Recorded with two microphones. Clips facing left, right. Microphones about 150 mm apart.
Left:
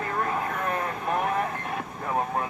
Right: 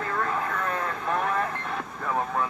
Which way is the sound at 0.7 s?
20° left (ahead or behind).